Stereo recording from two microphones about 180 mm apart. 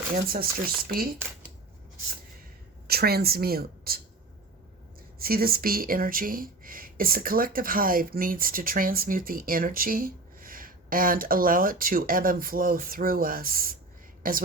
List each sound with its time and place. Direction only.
0.3 s speech: 55° right (ahead or behind)
2.8 s speech: 60° right (ahead or behind)
5.2 s a woman's voice: 55° right (ahead or behind)